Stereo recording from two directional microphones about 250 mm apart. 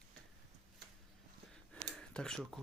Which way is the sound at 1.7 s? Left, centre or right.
Centre.